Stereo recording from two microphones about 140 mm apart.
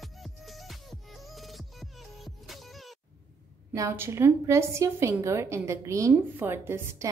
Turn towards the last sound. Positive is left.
turn(degrees=-20)  # may be behind; listen again after turning